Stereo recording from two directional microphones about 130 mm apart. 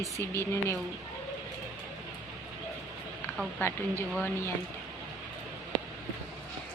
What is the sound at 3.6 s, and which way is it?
Speech, 20° left (ahead or behind).